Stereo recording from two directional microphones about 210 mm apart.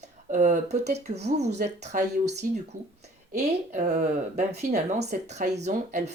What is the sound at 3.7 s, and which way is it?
Speech, 35° right (ahead or behind).